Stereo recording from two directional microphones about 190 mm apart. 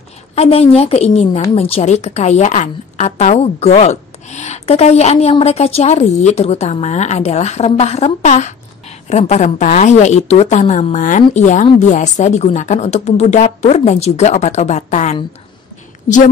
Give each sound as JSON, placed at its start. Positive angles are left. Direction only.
{"t": 0.4, "sound": "a woman's voice", "side_deg": 30}